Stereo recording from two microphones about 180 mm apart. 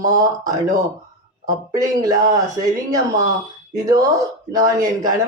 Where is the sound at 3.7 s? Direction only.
20° right (ahead or behind).